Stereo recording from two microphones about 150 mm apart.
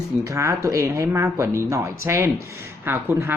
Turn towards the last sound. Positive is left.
turn(degrees=-15)  # may be behind; listen again after turning